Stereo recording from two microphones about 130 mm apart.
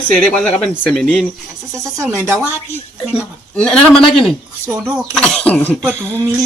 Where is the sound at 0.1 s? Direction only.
10° left (ahead or behind).